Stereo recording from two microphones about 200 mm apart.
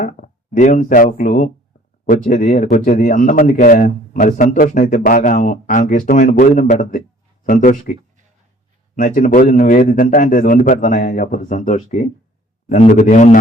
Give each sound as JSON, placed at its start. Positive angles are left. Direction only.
{"t": 0.0, "sound": "a man's voice", "side_deg": 40}
{"t": 9.0, "sound": "a man's voice", "side_deg": 40}